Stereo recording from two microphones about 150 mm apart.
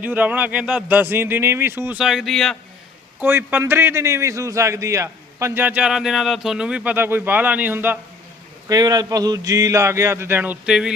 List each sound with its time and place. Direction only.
0.0 s a man's voice: 10° right (ahead or behind)
2.0 s speech: 5° right (ahead or behind)
3.2 s a man's voice: 15° right (ahead or behind)
8.7 s speech: 25° right (ahead or behind); by 10.9 s 5° right (ahead or behind)